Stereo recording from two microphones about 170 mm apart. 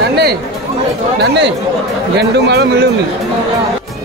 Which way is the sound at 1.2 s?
85° right.